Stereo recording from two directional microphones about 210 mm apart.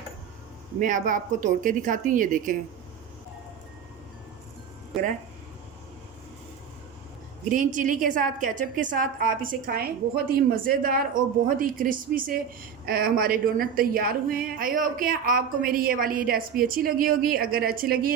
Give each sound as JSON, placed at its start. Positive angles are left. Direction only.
{"t": 0.8, "sound": "a woman's voice", "side_deg": -40}
{"t": 7.4, "sound": "a woman's voice", "side_deg": -40}